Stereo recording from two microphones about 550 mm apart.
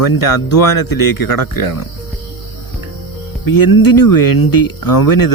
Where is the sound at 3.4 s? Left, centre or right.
Left.